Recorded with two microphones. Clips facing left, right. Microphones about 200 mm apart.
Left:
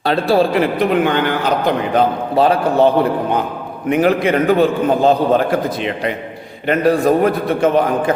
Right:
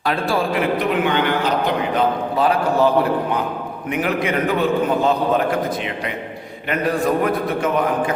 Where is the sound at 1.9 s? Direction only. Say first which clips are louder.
Left 4 dB; 30° left (ahead or behind).